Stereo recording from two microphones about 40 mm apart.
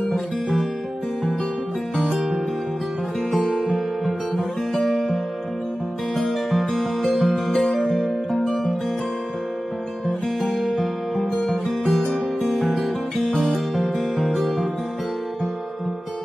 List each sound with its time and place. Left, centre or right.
0.1 s music: centre
2.0 s music: centre
3.7 s music: centre
10.4 s music: centre